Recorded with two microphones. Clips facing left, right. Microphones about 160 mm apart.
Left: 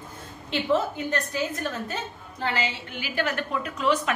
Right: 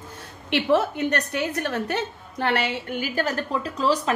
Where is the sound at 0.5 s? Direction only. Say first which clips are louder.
Right 4 dB; 70° right (ahead or behind).